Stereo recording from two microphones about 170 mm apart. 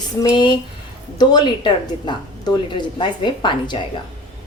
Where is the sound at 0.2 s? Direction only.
25° left (ahead or behind).